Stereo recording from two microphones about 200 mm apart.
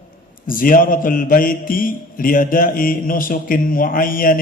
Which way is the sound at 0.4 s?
45° left (ahead or behind).